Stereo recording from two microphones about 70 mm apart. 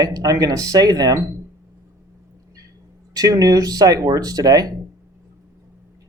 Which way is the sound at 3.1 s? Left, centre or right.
Right.